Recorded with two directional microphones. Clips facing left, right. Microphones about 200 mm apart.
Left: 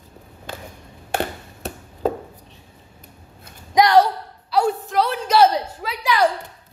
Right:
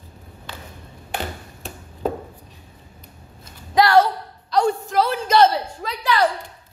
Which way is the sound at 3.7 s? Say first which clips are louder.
Left 1 dB; 15° left (ahead or behind).